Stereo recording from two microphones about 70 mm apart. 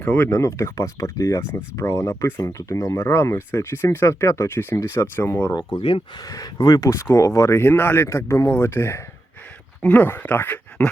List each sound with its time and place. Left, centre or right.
0.0 s speech: left
0.3 s speech: left
5.5 s speech: left
6.2 s speech: left
6.9 s speech: left
7.6 s speech: left